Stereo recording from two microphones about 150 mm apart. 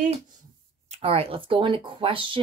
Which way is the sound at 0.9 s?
40° right (ahead or behind).